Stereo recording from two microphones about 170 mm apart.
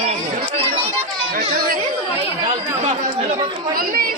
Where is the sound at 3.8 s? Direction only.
60° right (ahead or behind).